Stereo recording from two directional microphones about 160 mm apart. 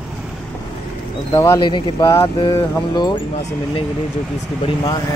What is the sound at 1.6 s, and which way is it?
A man's voice, 30° left (ahead or behind).